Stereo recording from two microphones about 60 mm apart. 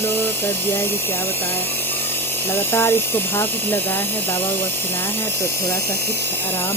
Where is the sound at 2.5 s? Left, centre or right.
Left.